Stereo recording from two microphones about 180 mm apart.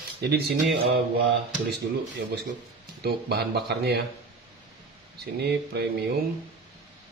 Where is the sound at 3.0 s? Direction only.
60° right (ahead or behind).